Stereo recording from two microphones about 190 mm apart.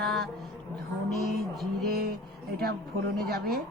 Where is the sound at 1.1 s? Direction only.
Centre (ahead or behind).